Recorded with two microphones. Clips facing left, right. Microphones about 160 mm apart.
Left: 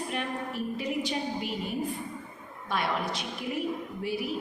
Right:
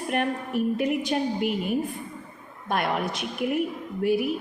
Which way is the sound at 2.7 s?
55° right (ahead or behind).